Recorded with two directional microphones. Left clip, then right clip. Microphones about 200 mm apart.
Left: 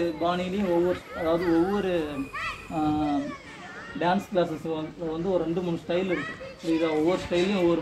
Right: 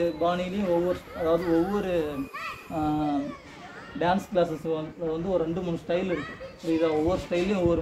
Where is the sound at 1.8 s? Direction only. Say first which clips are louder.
Even; 30° right (ahead or behind).